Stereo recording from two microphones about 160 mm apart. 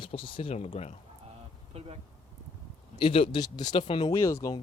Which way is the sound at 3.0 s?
30° left (ahead or behind).